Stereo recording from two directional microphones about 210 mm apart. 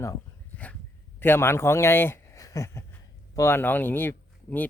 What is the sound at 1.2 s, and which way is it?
Speech, 10° left (ahead or behind).